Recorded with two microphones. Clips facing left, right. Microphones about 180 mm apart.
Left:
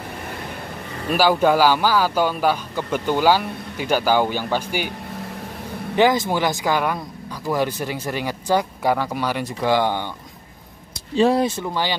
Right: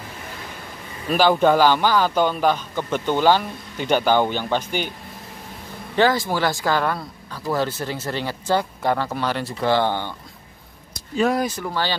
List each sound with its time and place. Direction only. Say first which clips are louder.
1.1 s a man's voice: even; 5° left (ahead or behind)
5.9 s a man's voice: left 1 dB; 20° left (ahead or behind)
11.1 s speech: left 3 dB; 30° left (ahead or behind)